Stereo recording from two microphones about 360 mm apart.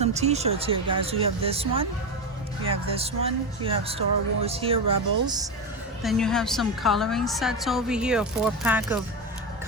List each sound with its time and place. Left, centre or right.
0.0 s speech: centre
6.0 s a woman's voice: centre